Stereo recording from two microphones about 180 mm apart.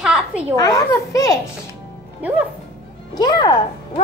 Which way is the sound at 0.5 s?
20° left (ahead or behind).